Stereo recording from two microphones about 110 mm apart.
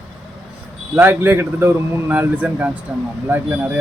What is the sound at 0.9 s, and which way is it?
A man's voice, 20° right (ahead or behind).